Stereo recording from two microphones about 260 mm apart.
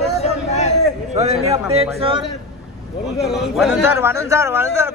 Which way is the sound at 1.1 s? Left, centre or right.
Right.